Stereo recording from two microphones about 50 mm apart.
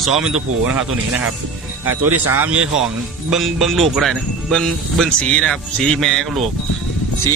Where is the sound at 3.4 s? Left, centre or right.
Centre.